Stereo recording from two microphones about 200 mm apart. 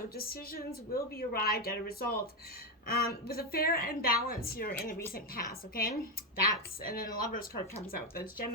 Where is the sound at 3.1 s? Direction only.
50° left (ahead or behind).